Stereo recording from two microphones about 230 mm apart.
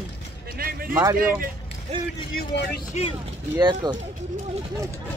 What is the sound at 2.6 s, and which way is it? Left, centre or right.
Speech, left.